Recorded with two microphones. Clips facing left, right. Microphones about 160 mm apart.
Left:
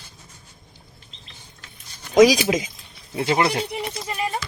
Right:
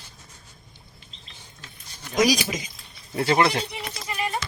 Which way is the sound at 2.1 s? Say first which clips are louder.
Left 7 dB; 90° left.